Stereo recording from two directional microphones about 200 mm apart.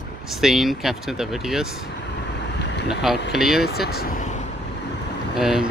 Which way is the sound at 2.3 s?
60° left (ahead or behind).